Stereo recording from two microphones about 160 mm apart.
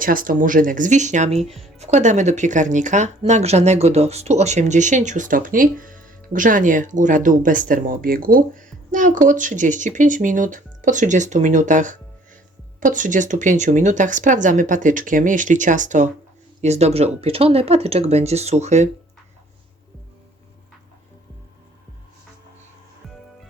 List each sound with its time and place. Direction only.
0.0 s speech: 60° right (ahead or behind)
1.5 s speech: centre (ahead or behind)
1.8 s speech: 45° right (ahead or behind)